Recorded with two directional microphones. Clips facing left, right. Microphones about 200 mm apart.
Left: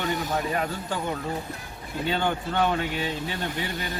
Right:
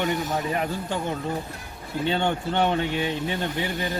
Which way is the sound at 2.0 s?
25° right (ahead or behind).